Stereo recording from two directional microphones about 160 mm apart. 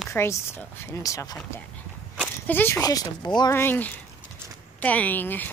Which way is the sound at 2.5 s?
15° left (ahead or behind).